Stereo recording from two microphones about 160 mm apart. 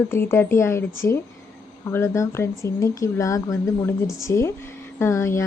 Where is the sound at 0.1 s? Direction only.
15° left (ahead or behind).